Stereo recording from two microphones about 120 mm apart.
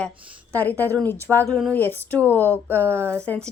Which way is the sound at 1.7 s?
15° left (ahead or behind).